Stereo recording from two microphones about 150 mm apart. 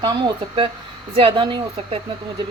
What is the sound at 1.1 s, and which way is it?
Speech, 35° right (ahead or behind).